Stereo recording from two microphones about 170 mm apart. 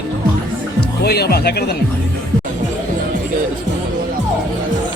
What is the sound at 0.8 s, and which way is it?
Speech, 70° left (ahead or behind).